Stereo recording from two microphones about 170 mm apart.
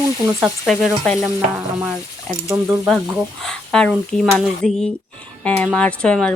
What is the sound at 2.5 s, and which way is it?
Speech, 20° right (ahead or behind).